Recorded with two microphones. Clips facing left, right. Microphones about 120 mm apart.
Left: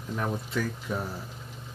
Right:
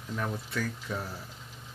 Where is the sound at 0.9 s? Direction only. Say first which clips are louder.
Left 5 dB; 15° left (ahead or behind).